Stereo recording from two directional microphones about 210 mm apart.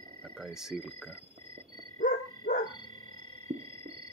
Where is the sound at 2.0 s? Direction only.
40° left (ahead or behind).